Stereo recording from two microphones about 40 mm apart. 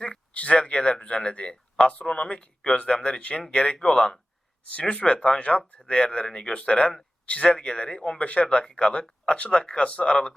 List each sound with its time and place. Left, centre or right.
0.5 s speech: left
3.8 s speech: centre
4.7 s speech: left
5.4 s speech: left
5.9 s speech: left